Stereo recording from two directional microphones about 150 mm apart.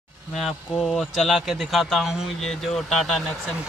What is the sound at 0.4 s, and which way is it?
A man's voice, centre (ahead or behind).